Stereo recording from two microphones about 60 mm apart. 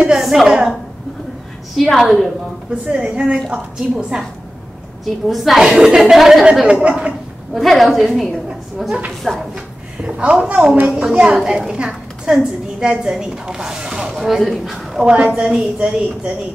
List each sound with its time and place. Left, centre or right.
0.2 s a sound: centre
0.5 s a woman's voice: centre
1.8 s a woman's voice: centre
2.9 s a woman's voice: centre
5.3 s a woman's voice: centre
6.7 s a woman's voice: centre
7.5 s a woman's voice: centre
9.3 s a woman's voice: centre
10.0 s a woman's voice: centre
15.0 s a woman's voice: centre